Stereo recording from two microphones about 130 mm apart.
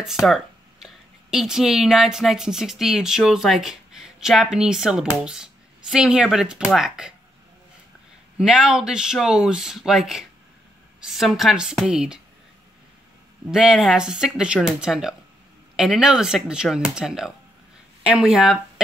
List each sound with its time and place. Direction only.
0.0 s speech: 5° right (ahead or behind)
8.4 s speech: 5° right (ahead or behind)
13.5 s speech: 5° right (ahead or behind)